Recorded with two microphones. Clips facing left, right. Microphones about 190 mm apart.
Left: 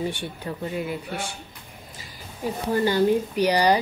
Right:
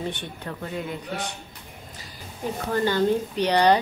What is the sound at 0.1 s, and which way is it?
Speech, 10° left (ahead or behind).